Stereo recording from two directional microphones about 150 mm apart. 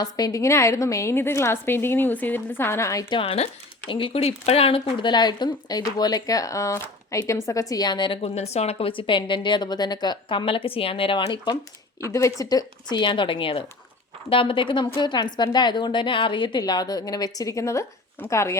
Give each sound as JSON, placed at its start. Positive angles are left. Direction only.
{"t": 0.0, "sound": "a woman's voice", "side_deg": 25}
{"t": 3.2, "sound": "a woman's voice", "side_deg": 40}